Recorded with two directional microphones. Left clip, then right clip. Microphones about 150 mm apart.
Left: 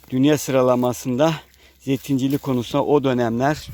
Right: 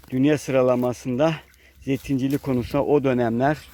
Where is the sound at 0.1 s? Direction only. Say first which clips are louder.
Left 2 dB; 30° left (ahead or behind).